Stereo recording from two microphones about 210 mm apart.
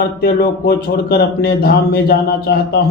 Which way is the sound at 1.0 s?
50° left (ahead or behind).